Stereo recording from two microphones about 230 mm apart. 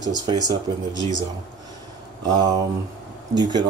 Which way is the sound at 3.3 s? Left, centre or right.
Centre.